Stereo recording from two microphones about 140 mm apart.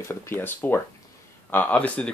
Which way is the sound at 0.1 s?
15° left (ahead or behind).